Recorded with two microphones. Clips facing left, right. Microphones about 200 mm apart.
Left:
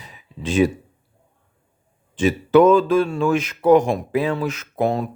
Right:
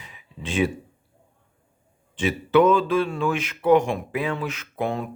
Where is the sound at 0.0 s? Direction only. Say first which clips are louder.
Left 6 dB; 40° left (ahead or behind).